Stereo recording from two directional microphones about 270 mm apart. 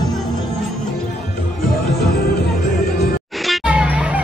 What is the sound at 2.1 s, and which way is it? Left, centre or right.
Music, left.